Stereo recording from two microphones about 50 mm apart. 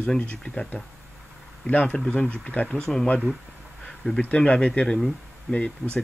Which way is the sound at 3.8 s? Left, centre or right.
Centre.